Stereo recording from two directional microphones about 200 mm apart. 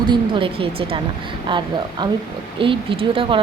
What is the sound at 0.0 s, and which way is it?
A woman's voice, 25° right (ahead or behind).